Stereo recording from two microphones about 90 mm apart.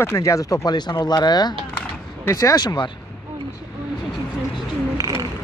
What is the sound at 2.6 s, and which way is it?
Speech, 55° left (ahead or behind).